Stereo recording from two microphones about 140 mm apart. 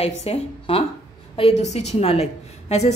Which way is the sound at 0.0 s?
50° left (ahead or behind).